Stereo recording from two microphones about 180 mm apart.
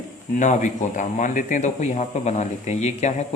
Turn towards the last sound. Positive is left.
turn(degrees=40)  # may be behind; listen again after turning